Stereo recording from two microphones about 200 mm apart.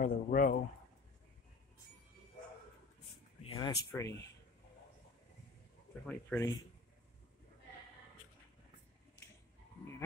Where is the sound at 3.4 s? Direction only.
20° left (ahead or behind).